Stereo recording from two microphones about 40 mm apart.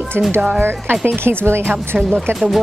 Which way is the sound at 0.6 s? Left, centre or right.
Right.